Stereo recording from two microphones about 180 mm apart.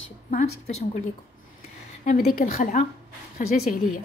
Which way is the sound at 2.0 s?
45° left (ahead or behind).